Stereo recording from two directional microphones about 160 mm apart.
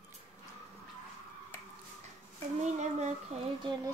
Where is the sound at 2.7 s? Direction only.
45° right (ahead or behind).